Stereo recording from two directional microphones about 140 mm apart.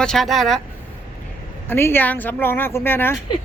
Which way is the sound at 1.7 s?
15° left (ahead or behind).